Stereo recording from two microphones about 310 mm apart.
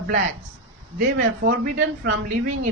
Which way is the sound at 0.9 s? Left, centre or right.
Right.